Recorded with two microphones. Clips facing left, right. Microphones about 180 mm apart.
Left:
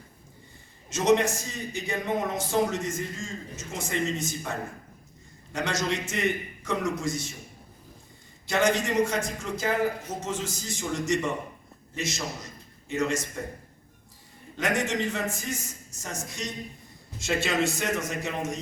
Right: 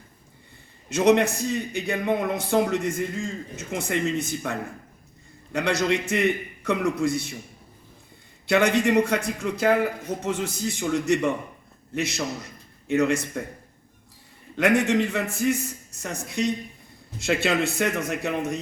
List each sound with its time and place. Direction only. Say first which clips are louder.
0.9 s a man's voice: right 3 dB; 60° right (ahead or behind)
8.4 s a man's voice: right 5 dB; 60° right (ahead or behind)
14.5 s a man's voice: right 7 dB; 60° right (ahead or behind)